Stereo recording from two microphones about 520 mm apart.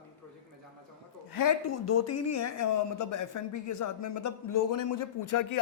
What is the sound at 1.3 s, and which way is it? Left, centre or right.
Speech, left.